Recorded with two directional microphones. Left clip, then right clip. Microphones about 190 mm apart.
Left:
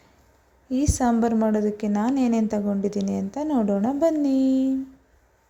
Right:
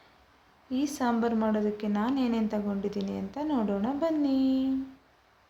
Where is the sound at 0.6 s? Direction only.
35° left (ahead or behind).